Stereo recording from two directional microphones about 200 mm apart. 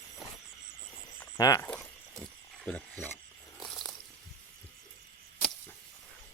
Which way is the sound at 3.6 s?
Centre (ahead or behind).